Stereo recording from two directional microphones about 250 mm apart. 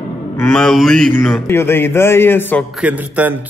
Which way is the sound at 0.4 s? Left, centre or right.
Centre.